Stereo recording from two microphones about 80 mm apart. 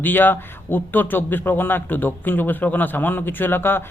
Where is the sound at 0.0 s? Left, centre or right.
Left.